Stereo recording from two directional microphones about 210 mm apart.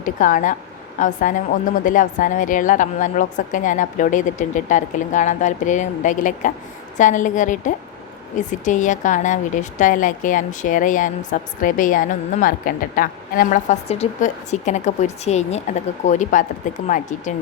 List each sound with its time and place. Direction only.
0.0 s a woman's voice: 40° left (ahead or behind)